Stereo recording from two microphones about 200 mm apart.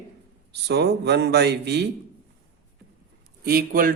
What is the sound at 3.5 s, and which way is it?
Speech, 50° right (ahead or behind).